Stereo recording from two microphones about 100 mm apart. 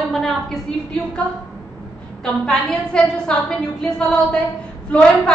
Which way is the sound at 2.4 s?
10° left (ahead or behind).